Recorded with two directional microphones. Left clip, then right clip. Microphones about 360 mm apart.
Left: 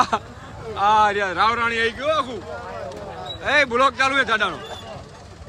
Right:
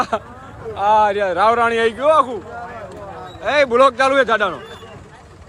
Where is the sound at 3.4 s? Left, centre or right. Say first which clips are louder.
Right 4 dB; centre.